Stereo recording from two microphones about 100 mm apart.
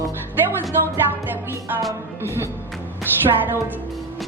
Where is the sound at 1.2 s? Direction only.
20° right (ahead or behind).